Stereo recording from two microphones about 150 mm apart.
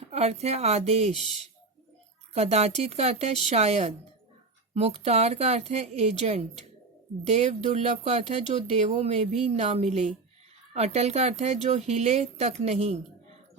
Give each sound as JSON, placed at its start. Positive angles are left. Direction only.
{"t": 0.1, "sound": "speech", "side_deg": -45}
{"t": 2.3, "sound": "speech", "side_deg": -45}